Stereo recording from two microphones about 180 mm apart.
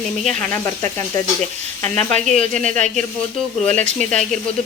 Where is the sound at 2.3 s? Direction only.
45° right (ahead or behind).